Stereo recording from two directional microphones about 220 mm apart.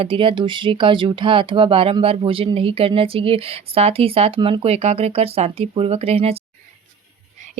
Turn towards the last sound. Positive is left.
turn(degrees=-25)  # may be behind; listen again after turning